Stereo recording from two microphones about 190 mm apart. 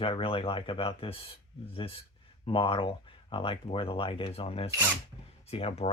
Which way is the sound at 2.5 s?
30° left (ahead or behind).